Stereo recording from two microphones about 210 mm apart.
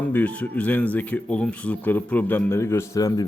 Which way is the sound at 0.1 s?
5° left (ahead or behind).